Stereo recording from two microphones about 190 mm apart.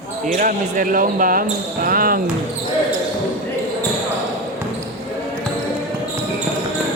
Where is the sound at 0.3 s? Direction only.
45° right (ahead or behind).